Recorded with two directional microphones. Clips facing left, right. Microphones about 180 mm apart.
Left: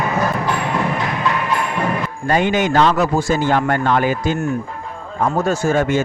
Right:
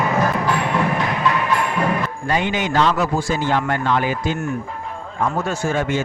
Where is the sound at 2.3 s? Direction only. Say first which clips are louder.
Left 6 dB; 45° left (ahead or behind).